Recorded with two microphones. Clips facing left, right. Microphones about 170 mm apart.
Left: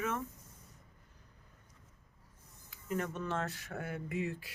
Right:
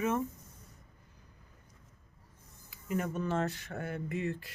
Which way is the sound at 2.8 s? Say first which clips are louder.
Right 3 dB; 5° right (ahead or behind).